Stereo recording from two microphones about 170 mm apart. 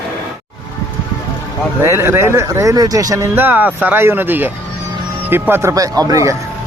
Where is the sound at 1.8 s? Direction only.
15° right (ahead or behind).